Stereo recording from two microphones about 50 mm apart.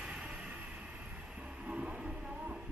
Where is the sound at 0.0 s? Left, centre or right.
Right.